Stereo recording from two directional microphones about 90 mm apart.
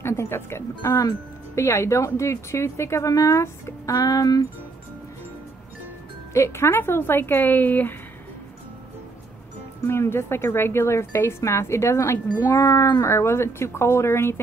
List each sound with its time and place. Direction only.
0.0 s speech: 30° left (ahead or behind)
6.3 s speech: 30° left (ahead or behind)
9.8 s speech: 30° left (ahead or behind)